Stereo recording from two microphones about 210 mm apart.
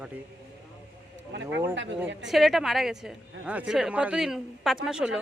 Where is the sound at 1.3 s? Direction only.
60° right (ahead or behind).